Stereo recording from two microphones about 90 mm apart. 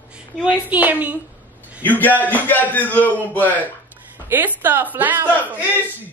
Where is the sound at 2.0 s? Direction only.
20° left (ahead or behind).